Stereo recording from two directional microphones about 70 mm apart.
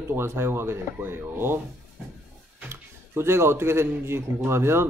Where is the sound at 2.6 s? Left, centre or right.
Right.